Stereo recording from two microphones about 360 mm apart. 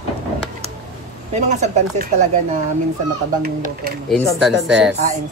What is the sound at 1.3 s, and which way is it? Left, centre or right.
Speech, centre.